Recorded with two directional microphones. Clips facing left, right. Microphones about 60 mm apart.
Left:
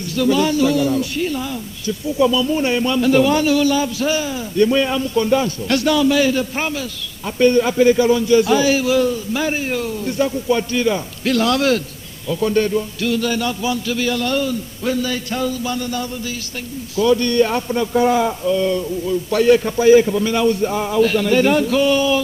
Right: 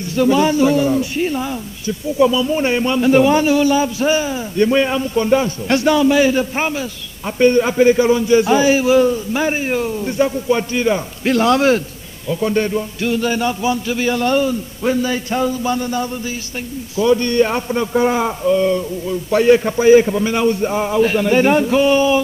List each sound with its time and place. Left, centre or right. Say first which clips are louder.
0.1 s a man's voice: right 2 dB; right